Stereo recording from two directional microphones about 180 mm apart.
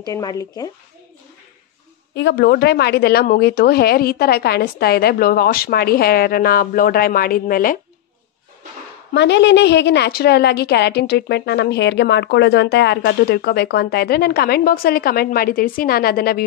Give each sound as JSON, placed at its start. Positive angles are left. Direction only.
{"t": 0.0, "sound": "speech", "side_deg": 20}
{"t": 2.1, "sound": "a woman's voice", "side_deg": 70}
{"t": 9.1, "sound": "a woman's voice", "side_deg": 75}